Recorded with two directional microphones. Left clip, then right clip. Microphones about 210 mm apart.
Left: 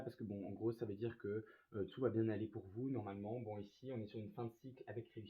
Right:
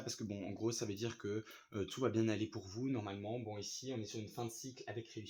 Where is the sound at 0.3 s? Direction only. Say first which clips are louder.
Right 2 dB; 40° right (ahead or behind).